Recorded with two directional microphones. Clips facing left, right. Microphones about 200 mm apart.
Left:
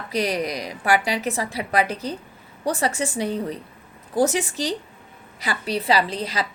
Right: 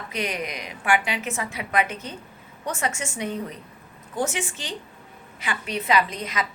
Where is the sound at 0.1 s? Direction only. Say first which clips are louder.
Left 6 dB; 35° left (ahead or behind).